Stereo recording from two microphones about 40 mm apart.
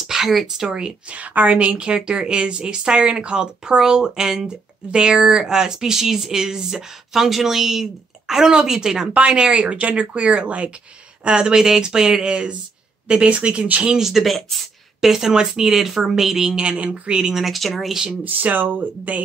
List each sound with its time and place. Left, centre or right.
0.0 s a sound: centre
0.6 s a woman's voice: centre
1.1 s a woman's voice: right; by 9.1 s centre
9.1 s a woman's voice: right
14.0 s speech: centre
15.0 s speech: centre
16.6 s a woman's voice: right
17.3 s speech: centre
18.2 s speech: right